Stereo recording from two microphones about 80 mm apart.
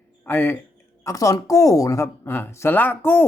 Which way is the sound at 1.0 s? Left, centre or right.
Left.